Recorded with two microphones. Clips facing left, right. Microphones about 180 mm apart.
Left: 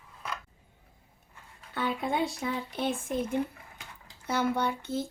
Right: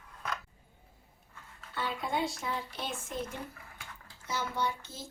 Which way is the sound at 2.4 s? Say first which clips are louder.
Left 5 dB; 55° left (ahead or behind).